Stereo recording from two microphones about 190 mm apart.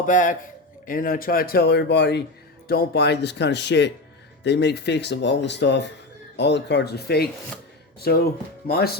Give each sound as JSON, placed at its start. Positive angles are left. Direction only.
{"t": 0.0, "sound": "speech", "side_deg": 45}